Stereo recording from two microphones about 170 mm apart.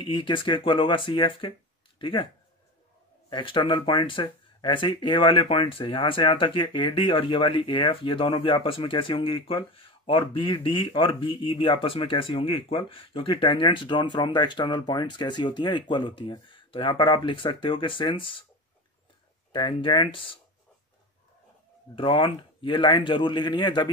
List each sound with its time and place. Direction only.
0.0 s speech: 30° left (ahead or behind)
3.3 s speech: 30° left (ahead or behind)
19.5 s speech: 30° left (ahead or behind)
21.9 s speech: 30° left (ahead or behind)